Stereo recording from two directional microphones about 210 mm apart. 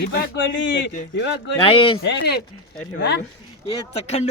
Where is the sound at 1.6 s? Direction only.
25° left (ahead or behind).